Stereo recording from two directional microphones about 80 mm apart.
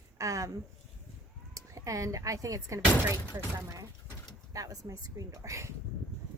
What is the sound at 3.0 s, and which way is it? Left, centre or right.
A woman's voice, right.